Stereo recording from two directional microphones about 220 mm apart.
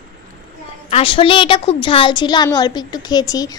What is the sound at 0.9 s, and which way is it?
A woman's voice, 25° left (ahead or behind).